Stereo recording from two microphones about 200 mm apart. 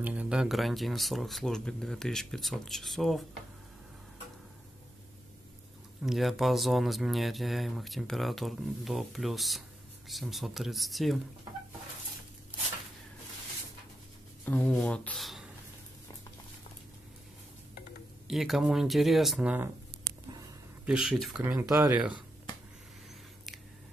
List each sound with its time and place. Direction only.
0.0 s speech: 5° right (ahead or behind)
6.0 s speech: centre (ahead or behind)
14.4 s speech: 5° left (ahead or behind)
18.2 s speech: centre (ahead or behind)
21.5 s speech: 15° right (ahead or behind)